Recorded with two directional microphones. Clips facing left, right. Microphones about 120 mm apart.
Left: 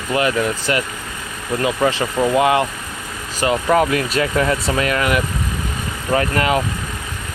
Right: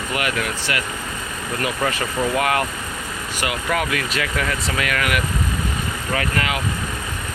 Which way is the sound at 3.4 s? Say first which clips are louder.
Left 8 dB; 35° left (ahead or behind).